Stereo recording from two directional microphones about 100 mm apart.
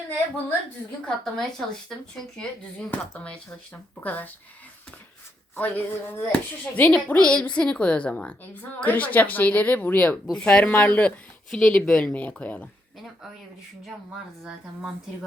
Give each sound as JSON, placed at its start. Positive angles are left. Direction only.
{"t": 1.0, "sound": "speech", "side_deg": 5}
{"t": 5.5, "sound": "speech", "side_deg": 20}